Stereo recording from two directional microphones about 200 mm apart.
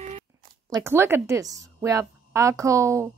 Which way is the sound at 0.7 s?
10° right (ahead or behind).